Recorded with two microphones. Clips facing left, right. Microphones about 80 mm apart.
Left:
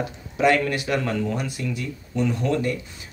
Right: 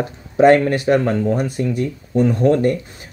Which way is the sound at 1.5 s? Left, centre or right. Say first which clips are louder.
Right 9 dB; right.